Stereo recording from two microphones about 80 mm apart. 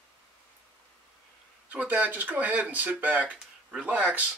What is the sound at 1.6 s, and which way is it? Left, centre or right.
Speech, centre.